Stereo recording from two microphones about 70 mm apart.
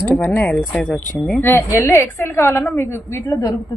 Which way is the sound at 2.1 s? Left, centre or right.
Left.